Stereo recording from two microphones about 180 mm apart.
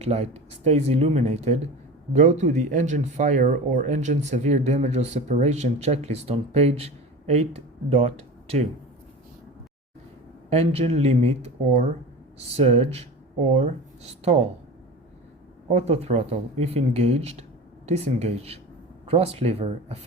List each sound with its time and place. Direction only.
0.0 s speech: 35° right (ahead or behind)
10.5 s speech: 35° right (ahead or behind)
15.7 s speech: 35° right (ahead or behind)